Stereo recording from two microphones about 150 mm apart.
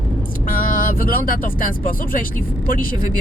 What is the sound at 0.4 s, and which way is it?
Speech, 65° left (ahead or behind).